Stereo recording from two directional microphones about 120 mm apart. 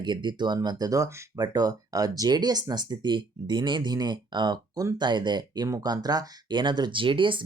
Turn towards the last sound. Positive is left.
turn(degrees=-45)  # may be behind; listen again after turning